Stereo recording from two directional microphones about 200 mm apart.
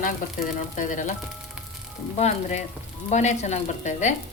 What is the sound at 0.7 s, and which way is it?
Speech, 40° left (ahead or behind).